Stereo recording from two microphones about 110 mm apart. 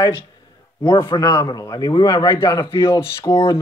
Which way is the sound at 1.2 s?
30° left (ahead or behind).